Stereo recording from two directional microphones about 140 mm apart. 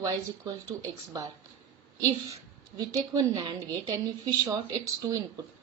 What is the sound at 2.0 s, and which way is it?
A woman's voice, 25° right (ahead or behind).